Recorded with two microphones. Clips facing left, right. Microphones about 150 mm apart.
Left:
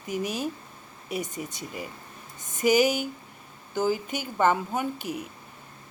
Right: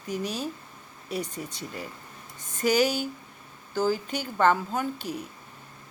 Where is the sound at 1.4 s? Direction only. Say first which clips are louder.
Left 1 dB; 5° left (ahead or behind).